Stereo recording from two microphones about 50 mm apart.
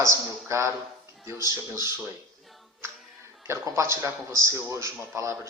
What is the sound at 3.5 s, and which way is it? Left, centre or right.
Speech, right.